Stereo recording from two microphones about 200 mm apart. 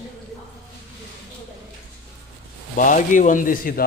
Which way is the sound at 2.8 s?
40° left (ahead or behind).